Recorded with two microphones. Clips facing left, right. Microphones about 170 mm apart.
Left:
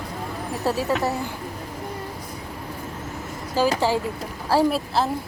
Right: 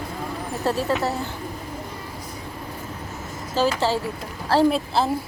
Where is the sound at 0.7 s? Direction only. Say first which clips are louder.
Even; 10° left (ahead or behind).